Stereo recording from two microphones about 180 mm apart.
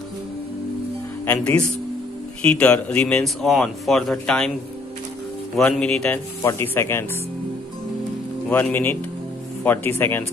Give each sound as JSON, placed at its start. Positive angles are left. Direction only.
{"t": 1.2, "sound": "speech", "side_deg": 10}
{"t": 5.6, "sound": "speech", "side_deg": 5}
{"t": 8.5, "sound": "speech", "side_deg": 10}